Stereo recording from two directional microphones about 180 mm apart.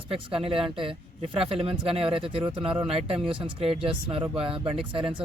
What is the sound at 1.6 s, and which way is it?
Speech, 30° right (ahead or behind).